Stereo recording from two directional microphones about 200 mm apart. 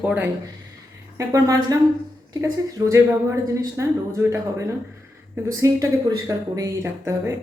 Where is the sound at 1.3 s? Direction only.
15° right (ahead or behind).